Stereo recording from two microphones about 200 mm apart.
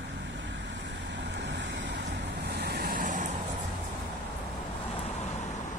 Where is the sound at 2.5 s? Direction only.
55° right (ahead or behind).